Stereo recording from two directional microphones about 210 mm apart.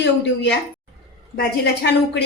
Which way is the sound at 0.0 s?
55° left (ahead or behind).